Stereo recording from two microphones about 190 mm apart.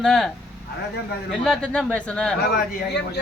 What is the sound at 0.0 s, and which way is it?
Speech, centre (ahead or behind).